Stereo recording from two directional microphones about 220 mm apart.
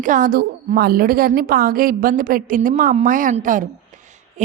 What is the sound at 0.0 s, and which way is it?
A woman's voice, 35° right (ahead or behind).